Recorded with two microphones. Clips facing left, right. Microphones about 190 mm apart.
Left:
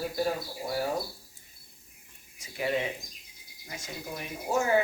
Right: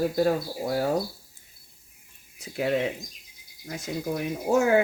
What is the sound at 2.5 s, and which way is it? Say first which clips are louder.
Speech: right 5 dB; 65° right (ahead or behind).